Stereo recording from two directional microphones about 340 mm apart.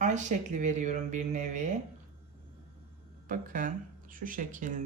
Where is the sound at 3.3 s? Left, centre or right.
Right.